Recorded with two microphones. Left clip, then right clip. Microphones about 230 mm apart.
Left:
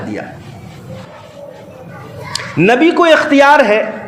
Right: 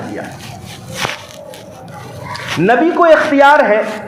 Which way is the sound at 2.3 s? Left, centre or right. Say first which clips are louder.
Left 1 dB; left.